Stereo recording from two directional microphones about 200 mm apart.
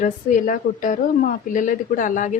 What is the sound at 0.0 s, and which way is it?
A woman's voice, 40° left (ahead or behind).